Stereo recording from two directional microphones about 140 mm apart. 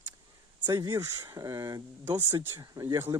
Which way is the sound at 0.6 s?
25° right (ahead or behind).